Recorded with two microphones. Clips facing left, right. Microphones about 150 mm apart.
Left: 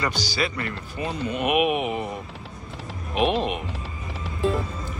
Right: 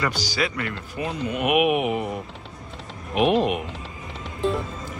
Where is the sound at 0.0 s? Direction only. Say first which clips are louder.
Right 1 dB; 10° right (ahead or behind).